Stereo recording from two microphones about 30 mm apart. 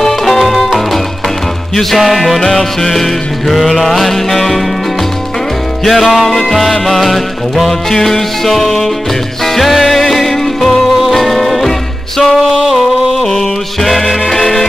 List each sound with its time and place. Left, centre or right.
0.0 s music: centre
5.9 s music: centre
7.9 s music: centre
11.0 s music: centre